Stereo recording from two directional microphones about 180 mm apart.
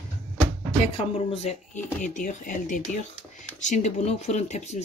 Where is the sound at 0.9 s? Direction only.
35° left (ahead or behind).